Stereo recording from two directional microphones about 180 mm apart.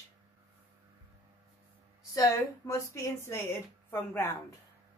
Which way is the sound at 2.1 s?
20° left (ahead or behind).